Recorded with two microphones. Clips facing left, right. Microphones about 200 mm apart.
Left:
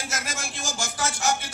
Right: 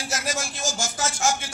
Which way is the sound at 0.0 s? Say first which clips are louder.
Right 4 dB; 55° left (ahead or behind).